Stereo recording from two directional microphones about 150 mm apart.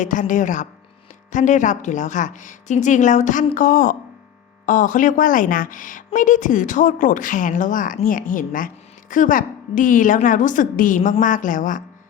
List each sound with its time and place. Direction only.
0.0 s speech: 55° left (ahead or behind)